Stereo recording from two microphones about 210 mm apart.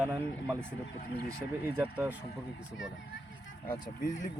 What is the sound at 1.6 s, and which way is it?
Speech, 10° right (ahead or behind).